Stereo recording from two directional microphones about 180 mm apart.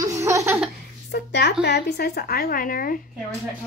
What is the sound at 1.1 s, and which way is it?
A woman's voice, 70° left (ahead or behind).